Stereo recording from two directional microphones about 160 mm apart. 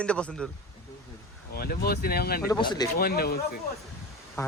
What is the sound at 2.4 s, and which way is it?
Speech, 25° left (ahead or behind).